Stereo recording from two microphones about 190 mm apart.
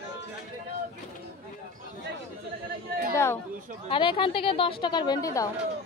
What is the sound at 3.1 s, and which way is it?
Chatter, 15° left (ahead or behind).